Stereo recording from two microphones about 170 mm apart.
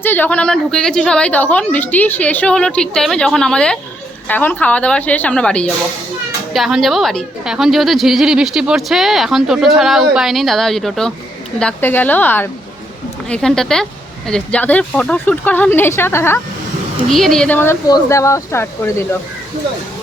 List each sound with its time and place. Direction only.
0.0 s a woman's voice: 10° left (ahead or behind)
17.1 s speech: centre (ahead or behind)